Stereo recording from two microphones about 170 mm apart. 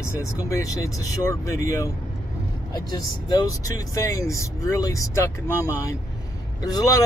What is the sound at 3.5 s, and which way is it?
Speech, 20° left (ahead or behind).